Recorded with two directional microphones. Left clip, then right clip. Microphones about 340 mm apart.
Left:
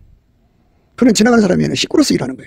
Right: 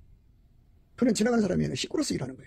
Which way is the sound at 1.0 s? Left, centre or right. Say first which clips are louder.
Left 14 dB; left.